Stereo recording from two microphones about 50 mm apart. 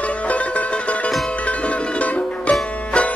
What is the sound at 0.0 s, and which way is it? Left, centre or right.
Music, left.